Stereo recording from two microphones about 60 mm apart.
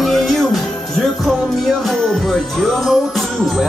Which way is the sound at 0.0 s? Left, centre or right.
Centre.